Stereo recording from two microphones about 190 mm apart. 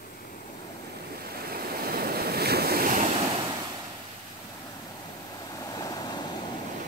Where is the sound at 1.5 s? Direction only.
50° right (ahead or behind).